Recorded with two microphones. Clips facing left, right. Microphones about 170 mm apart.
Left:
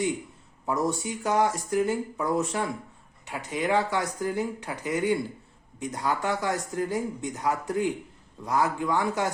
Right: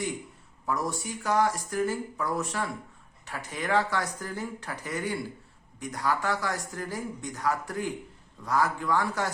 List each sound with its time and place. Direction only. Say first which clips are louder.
0.6 s speech: left 4 dB; 20° left (ahead or behind)